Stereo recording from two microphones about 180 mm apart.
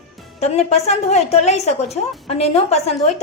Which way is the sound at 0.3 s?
35° left (ahead or behind).